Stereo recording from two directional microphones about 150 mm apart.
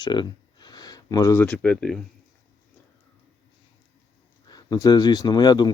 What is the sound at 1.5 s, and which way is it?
Speech, 5° left (ahead or behind).